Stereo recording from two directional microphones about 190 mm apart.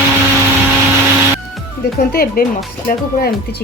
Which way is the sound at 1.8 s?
50° left (ahead or behind).